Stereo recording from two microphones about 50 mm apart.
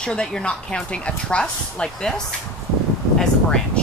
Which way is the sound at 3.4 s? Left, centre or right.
Centre.